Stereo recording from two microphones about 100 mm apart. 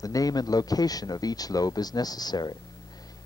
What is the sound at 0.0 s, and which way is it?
Speech, 35° left (ahead or behind).